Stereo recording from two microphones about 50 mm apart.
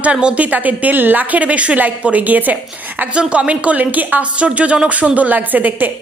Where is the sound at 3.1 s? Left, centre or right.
Right.